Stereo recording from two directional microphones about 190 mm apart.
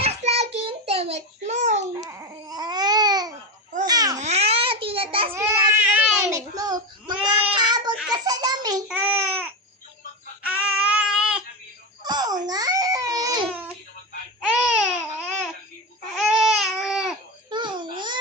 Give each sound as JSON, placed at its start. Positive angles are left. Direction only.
{"t": 0.0, "sound": "child singing", "side_deg": -35}
{"t": 2.0, "sound": "babbling", "side_deg": -15}
{"t": 4.2, "sound": "babbling", "side_deg": -35}
{"t": 5.3, "sound": "baby cry", "side_deg": -10}
{"t": 7.5, "sound": "child singing", "side_deg": -25}
{"t": 8.1, "sound": "a sound", "side_deg": -20}
{"t": 8.9, "sound": "a sound", "side_deg": -10}
{"t": 10.4, "sound": "child singing", "side_deg": -5}
{"t": 12.0, "sound": "baby cry", "side_deg": -20}
{"t": 14.4, "sound": "babbling", "side_deg": -5}
{"t": 16.3, "sound": "baby cry", "side_deg": 0}
{"t": 17.5, "sound": "babbling", "side_deg": -25}